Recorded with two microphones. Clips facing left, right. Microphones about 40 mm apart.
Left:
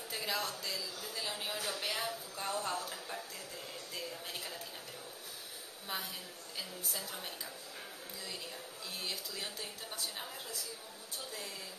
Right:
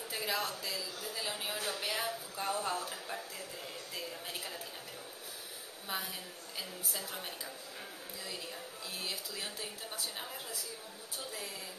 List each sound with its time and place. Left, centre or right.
0.1 s a woman's voice: centre
3.9 s a sound: centre
6.9 s a woman's voice: centre
9.0 s a woman's voice: centre